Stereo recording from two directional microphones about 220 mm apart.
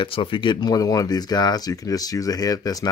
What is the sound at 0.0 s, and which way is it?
Speech, 25° left (ahead or behind).